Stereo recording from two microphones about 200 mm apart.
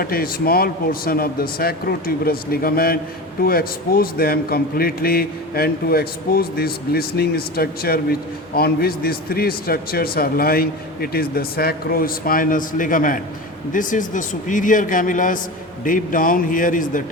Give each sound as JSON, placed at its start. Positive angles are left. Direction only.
{"t": 0.0, "sound": "a man's voice", "side_deg": 50}